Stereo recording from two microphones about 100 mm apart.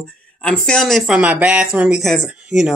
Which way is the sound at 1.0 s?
10° right (ahead or behind).